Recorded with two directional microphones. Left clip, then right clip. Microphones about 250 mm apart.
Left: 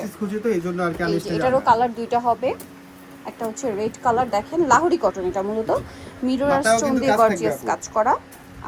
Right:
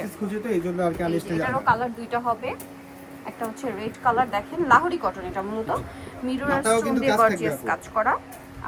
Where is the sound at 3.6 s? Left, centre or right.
Left.